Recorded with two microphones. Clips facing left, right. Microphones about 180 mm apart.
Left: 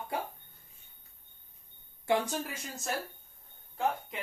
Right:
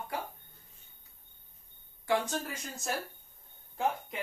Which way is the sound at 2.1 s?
25° left (ahead or behind).